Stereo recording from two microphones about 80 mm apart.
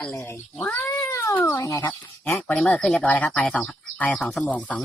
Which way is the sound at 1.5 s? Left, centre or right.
Left.